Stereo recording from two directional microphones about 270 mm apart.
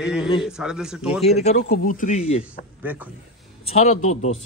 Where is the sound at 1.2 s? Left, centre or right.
Left.